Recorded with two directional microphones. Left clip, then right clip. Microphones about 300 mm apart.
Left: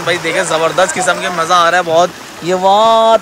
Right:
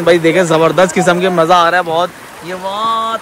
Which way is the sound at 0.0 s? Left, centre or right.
Centre.